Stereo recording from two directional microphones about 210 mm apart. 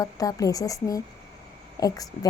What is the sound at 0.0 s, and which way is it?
A woman's voice, 15° left (ahead or behind).